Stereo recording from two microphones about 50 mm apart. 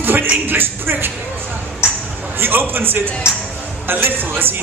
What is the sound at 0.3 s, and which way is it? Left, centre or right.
Speech, right.